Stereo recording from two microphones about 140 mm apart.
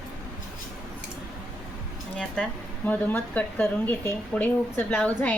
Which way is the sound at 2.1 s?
5° left (ahead or behind).